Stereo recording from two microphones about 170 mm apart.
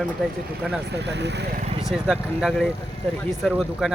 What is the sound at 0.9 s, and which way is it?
Speech, 85° right.